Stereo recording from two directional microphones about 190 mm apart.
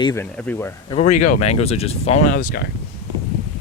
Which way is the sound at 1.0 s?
40° left (ahead or behind).